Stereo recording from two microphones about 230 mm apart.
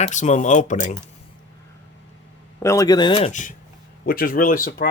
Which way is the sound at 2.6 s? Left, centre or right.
Centre.